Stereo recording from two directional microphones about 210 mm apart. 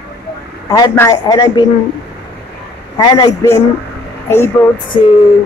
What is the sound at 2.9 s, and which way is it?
Speech, 20° left (ahead or behind).